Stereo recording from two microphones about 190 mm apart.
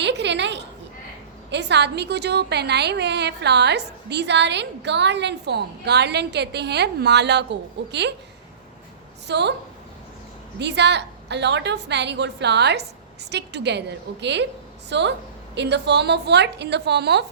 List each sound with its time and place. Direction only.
0.0 s a sound: 65° right (ahead or behind)
1.5 s a woman's voice: 65° right (ahead or behind)
9.2 s a woman's voice: 65° right (ahead or behind)
10.6 s a woman's voice: 65° right (ahead or behind)